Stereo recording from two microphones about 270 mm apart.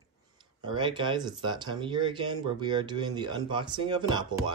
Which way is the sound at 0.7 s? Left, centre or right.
Centre.